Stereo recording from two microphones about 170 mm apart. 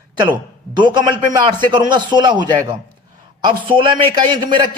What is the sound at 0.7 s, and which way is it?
Speech, 25° right (ahead or behind).